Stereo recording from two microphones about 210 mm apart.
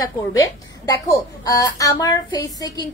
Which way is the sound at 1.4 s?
15° left (ahead or behind).